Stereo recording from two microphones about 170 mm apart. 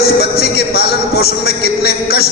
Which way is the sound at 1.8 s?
70° left (ahead or behind).